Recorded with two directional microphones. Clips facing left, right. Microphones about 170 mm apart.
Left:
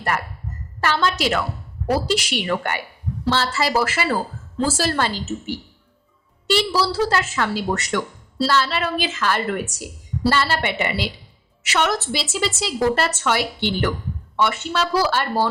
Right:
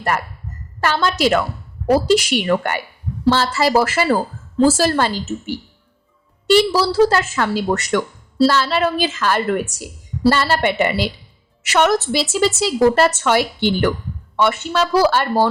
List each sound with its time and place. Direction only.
0.8 s a woman's voice: 45° right (ahead or behind)
6.5 s a woman's voice: 45° right (ahead or behind)